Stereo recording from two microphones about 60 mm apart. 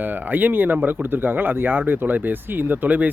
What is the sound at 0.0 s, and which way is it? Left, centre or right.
Speech, right.